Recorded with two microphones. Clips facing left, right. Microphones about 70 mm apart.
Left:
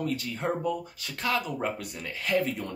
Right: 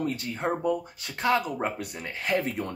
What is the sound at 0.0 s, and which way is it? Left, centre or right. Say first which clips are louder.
Speech: right 1 dB; right.